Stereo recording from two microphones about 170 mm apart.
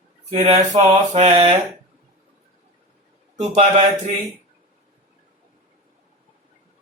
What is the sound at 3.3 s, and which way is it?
Speech, 40° right (ahead or behind).